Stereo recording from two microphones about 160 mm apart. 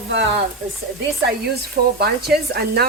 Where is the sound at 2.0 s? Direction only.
80° right.